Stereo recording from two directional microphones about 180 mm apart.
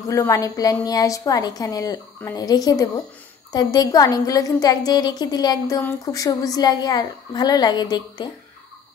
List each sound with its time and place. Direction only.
0.1 s a woman's voice: 15° left (ahead or behind)